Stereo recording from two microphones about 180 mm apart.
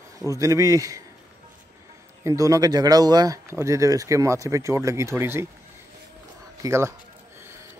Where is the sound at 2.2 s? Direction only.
20° right (ahead or behind).